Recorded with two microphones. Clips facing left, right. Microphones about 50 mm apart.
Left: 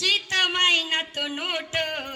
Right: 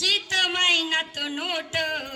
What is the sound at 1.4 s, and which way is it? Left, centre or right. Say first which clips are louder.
Music: right 1 dB; left.